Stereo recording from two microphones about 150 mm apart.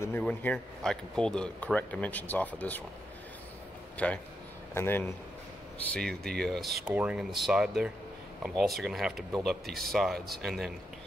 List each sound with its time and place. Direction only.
0.2 s speech: 10° left (ahead or behind)
3.9 s a man's voice: 10° left (ahead or behind)
5.9 s speech: 5° left (ahead or behind)
6.9 s speech: 10° right (ahead or behind)